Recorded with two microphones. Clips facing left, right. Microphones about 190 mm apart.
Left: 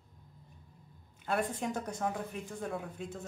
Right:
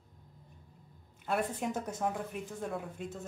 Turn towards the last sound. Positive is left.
turn(degrees=0)  # may be behind; listen again after turning